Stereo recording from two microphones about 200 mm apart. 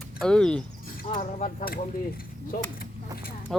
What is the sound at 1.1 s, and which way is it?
Speech, 35° left (ahead or behind).